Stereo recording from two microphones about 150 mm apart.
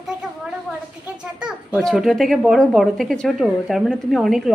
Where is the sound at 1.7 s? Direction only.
Centre (ahead or behind).